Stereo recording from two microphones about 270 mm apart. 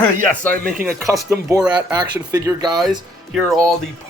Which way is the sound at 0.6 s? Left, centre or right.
Centre.